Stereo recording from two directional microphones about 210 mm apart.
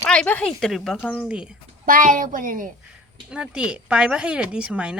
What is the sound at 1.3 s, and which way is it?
Speech, 5° right (ahead or behind).